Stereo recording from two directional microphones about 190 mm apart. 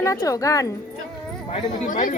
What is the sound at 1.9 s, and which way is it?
Speech, 45° left (ahead or behind).